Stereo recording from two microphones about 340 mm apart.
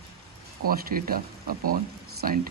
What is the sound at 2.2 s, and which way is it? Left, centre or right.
Speech, right.